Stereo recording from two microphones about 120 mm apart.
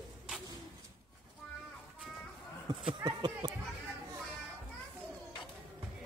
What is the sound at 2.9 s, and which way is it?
Speech, 40° right (ahead or behind).